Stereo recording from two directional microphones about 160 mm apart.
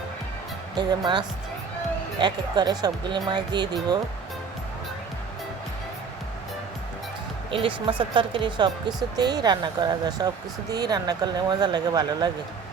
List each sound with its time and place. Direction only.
0.8 s speech: 25° right (ahead or behind)
7.5 s speech: 30° right (ahead or behind)